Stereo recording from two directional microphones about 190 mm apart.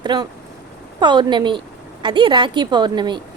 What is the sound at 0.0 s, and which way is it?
A woman's voice, 25° right (ahead or behind).